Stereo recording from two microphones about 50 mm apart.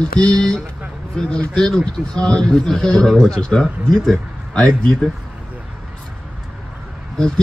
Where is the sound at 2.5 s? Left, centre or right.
Centre.